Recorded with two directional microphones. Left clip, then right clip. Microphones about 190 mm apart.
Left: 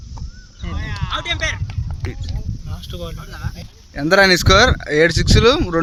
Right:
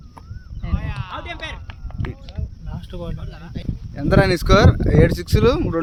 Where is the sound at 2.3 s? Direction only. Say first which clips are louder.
Left 3 dB; 55° right (ahead or behind).